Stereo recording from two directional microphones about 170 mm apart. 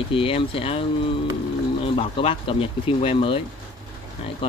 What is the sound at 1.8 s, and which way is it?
Speech, 35° left (ahead or behind).